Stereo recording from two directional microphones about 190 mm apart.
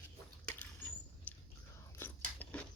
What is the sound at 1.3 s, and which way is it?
Whispering, 10° left (ahead or behind).